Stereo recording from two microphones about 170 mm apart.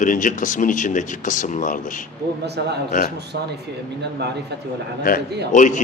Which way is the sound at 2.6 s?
85° right.